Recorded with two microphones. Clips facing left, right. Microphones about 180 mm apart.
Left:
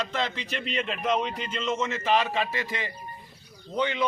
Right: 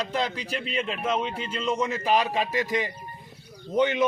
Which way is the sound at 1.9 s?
35° right (ahead or behind).